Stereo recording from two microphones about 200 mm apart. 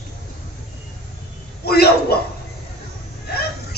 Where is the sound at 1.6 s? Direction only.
50° left (ahead or behind).